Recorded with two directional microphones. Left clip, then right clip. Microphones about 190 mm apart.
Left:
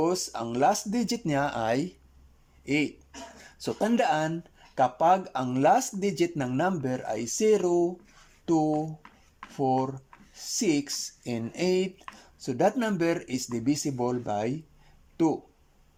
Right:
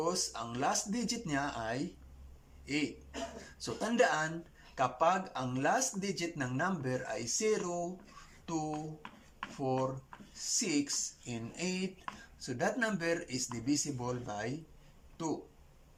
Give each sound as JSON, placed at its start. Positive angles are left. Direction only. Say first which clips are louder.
{"t": 0.0, "sound": "speech", "louder": "left 7 dB", "side_deg": 45}
{"t": 3.6, "sound": "speech", "louder": "left 4 dB", "side_deg": 45}
{"t": 10.3, "sound": "speech", "louder": "left 6 dB", "side_deg": 45}